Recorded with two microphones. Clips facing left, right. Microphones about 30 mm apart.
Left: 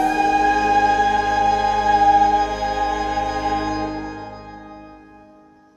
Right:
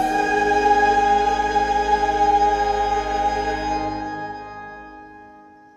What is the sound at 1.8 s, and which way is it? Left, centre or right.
Music, centre.